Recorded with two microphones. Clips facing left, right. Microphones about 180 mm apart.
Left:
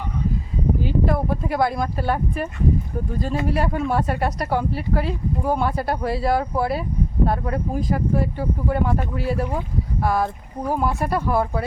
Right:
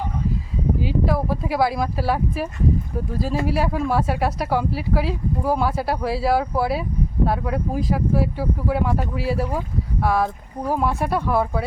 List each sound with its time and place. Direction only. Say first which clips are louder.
0.8 s speech: even; centre (ahead or behind)